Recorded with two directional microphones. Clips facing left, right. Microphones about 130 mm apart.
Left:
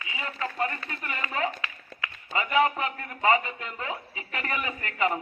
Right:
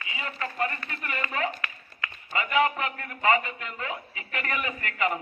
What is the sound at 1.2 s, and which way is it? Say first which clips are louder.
A man's voice: left 1 dB; 20° left (ahead or behind).